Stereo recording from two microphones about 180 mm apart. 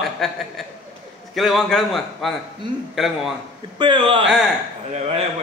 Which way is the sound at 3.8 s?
30° right (ahead or behind).